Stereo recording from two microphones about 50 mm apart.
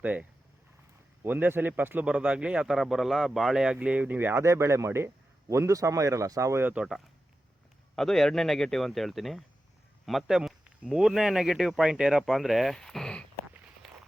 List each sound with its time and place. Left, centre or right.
0.0 s speech: right
2.0 s speech: right
3.8 s speech: right
4.4 s a man's voice: right
7.9 s a man's voice: centre
12.2 s speech: centre